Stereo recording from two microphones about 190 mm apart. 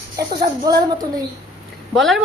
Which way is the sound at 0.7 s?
20° right (ahead or behind).